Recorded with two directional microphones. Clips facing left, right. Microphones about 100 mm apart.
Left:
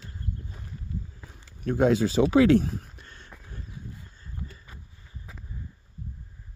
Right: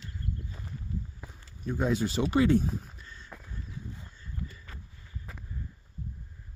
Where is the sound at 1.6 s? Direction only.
75° left (ahead or behind).